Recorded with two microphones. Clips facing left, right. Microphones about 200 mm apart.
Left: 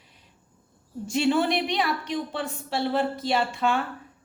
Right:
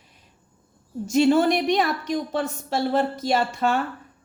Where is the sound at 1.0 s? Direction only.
45° right (ahead or behind).